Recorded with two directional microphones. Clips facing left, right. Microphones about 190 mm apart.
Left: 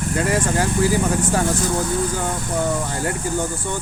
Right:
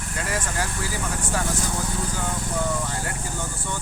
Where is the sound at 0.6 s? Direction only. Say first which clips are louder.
Left 11 dB; 20° left (ahead or behind).